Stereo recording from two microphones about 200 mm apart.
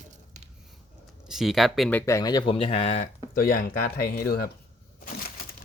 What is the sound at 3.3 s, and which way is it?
Speech, 50° left (ahead or behind).